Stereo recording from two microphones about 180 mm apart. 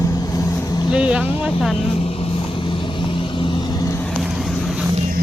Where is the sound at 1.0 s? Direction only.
5° right (ahead or behind).